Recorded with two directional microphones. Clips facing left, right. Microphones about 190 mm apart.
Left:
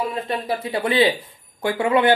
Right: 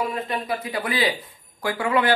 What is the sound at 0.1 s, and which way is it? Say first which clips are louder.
Speech: left 2 dB; 30° left (ahead or behind).